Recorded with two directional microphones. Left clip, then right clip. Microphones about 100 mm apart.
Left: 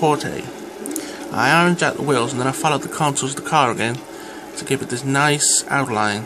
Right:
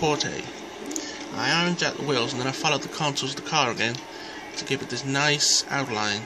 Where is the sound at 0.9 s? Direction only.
35° left (ahead or behind).